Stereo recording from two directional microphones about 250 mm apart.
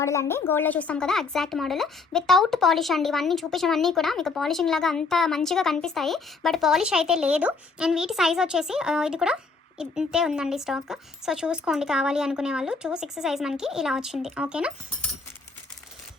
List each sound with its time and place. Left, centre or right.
0.0 s speech: centre